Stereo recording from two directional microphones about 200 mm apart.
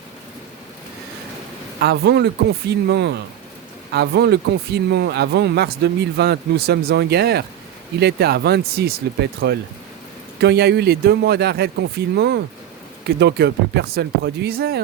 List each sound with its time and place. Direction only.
1.8 s speech: 55° right (ahead or behind)
10.4 s speech: 55° right (ahead or behind)